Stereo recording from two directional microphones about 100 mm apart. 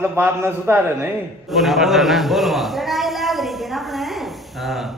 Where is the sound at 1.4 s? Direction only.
Centre (ahead or behind).